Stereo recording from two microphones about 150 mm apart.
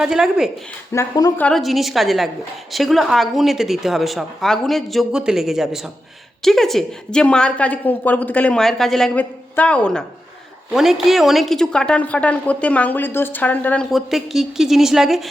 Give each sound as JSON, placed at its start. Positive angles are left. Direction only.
{"t": 0.0, "sound": "speech", "side_deg": -5}
{"t": 0.9, "sound": "speech", "side_deg": 25}
{"t": 1.4, "sound": "a woman's voice", "side_deg": 5}
{"t": 13.9, "sound": "speech", "side_deg": 0}